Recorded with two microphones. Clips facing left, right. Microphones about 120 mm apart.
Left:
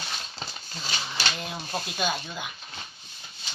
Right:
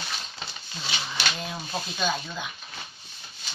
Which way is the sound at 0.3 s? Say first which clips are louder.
Left 1 dB; 35° left (ahead or behind).